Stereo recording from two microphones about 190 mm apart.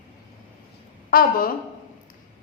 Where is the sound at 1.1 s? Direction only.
50° left (ahead or behind).